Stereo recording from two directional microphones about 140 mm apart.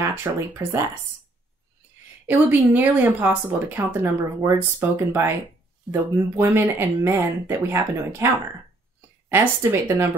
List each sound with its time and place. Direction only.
0.0 s speech: 20° right (ahead or behind)
2.2 s speech: 15° right (ahead or behind)
9.3 s speech: 15° right (ahead or behind)